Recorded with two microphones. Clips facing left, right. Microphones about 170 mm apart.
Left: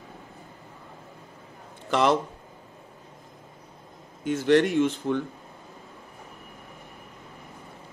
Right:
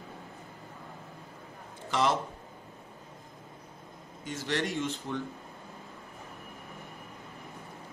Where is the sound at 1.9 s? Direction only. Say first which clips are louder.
Left 6 dB; 60° left (ahead or behind).